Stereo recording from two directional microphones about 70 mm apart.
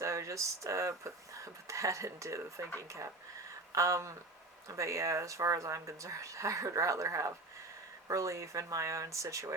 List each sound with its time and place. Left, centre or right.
0.0 s speech: right
3.8 s speech: right